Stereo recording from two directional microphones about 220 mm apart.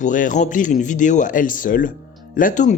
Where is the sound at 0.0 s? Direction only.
35° left (ahead or behind).